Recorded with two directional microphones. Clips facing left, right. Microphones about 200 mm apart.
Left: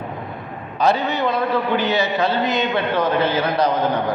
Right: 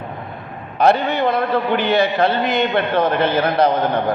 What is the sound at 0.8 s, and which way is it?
A man's voice, 60° right (ahead or behind).